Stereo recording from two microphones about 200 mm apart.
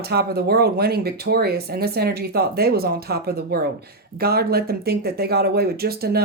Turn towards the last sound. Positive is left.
turn(degrees=-50)  # may be behind; listen again after turning